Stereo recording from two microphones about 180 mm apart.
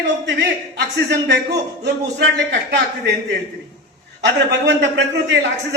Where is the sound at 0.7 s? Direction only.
75° right (ahead or behind).